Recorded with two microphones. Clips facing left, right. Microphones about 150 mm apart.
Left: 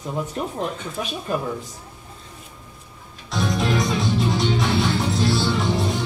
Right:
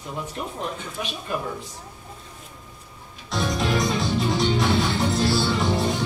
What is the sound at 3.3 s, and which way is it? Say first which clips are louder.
Music: left 2 dB; centre (ahead or behind).